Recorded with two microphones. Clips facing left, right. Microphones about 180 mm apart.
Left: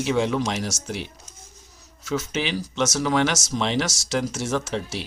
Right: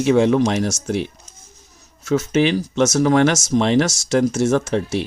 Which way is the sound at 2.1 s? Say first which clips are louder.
Right 9 dB; 50° right (ahead or behind).